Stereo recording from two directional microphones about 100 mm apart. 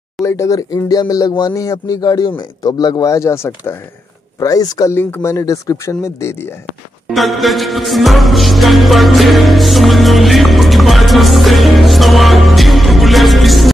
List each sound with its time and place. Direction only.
0.2 s speech: 30° left (ahead or behind)
4.9 s speech: 25° left (ahead or behind)
7.1 s music: centre (ahead or behind)